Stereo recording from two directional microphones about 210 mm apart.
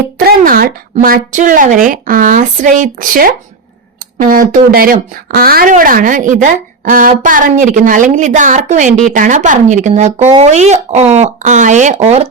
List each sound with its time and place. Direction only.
0.3 s speech: 45° right (ahead or behind); by 12.2 s 30° right (ahead or behind)